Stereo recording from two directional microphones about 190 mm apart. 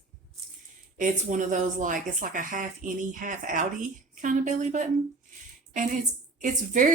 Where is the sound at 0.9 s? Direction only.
40° right (ahead or behind).